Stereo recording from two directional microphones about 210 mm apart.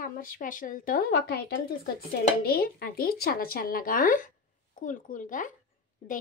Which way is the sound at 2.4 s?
45° left (ahead or behind).